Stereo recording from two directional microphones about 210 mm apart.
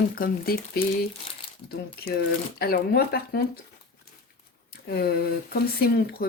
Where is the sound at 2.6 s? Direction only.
50° left (ahead or behind).